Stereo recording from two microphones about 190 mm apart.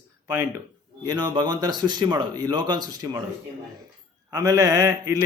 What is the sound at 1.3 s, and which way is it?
Speech, 20° right (ahead or behind).